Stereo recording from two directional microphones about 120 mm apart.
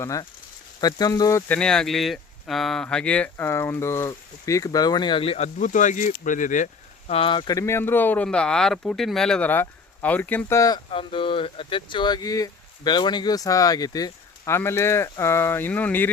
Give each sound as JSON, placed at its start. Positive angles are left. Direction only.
{"t": 0.0, "sound": "speech", "side_deg": 25}
{"t": 1.5, "sound": "speech", "side_deg": 5}
{"t": 5.5, "sound": "speech", "side_deg": 90}
{"t": 7.1, "sound": "speech", "side_deg": 45}
{"t": 7.6, "sound": "speech", "side_deg": 20}
{"t": 10.5, "sound": "speech", "side_deg": 30}
{"t": 10.9, "sound": "speech", "side_deg": 45}